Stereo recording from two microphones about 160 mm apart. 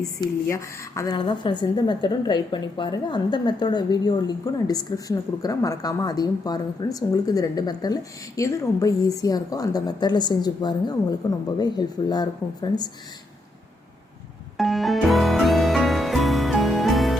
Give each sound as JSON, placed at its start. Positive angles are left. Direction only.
{"t": 0.4, "sound": "speech", "side_deg": 20}
{"t": 1.1, "sound": "a woman's voice", "side_deg": 30}
{"t": 14.6, "sound": "music", "side_deg": 0}